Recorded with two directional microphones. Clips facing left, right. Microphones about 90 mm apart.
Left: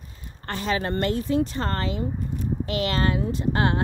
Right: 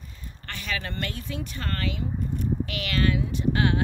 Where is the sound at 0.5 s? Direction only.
35° left (ahead or behind).